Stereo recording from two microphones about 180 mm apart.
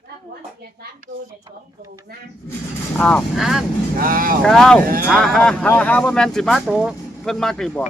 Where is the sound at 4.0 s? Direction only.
50° right (ahead or behind).